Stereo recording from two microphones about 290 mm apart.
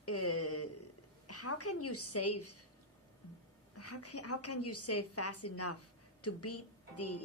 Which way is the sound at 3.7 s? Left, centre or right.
Left.